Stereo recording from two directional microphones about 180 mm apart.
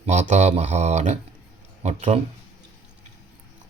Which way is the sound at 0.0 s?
40° right (ahead or behind).